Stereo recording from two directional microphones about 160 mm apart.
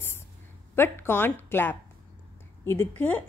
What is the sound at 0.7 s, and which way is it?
A woman's voice, 15° left (ahead or behind).